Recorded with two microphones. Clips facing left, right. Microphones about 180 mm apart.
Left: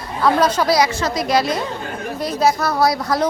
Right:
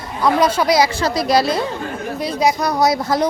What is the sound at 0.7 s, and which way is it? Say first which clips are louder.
Speech: right 1 dB; 30° right (ahead or behind).